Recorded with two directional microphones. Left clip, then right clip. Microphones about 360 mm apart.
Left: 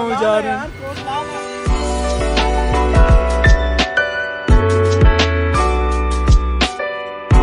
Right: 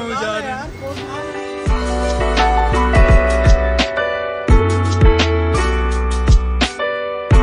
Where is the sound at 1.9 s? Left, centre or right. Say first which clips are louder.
Right 2 dB; centre.